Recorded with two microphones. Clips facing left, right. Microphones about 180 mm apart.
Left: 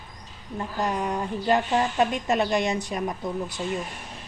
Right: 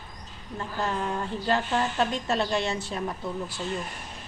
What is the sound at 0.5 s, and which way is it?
A woman's voice, 15° left (ahead or behind).